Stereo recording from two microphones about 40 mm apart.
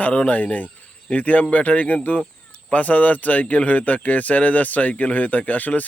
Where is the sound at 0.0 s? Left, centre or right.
Left.